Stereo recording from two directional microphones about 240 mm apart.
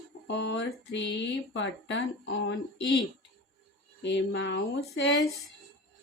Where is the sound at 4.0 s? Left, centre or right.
Left.